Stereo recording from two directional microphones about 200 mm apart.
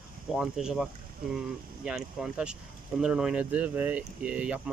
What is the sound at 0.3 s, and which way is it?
Speech, 5° right (ahead or behind).